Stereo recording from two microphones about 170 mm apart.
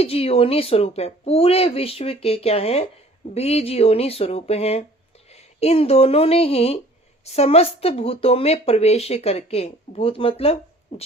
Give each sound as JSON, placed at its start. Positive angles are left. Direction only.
{"t": 0.0, "sound": "speech", "side_deg": 35}